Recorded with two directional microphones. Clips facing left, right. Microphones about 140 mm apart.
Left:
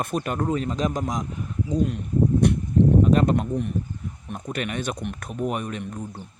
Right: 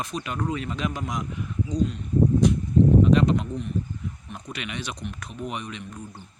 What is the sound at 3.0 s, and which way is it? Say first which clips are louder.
Speech: even; 45° left (ahead or behind).